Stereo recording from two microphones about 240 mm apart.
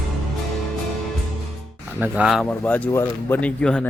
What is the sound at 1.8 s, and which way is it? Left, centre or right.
Speech, centre.